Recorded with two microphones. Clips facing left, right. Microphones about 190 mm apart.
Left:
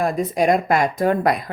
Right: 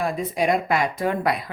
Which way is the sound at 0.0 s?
45° left (ahead or behind).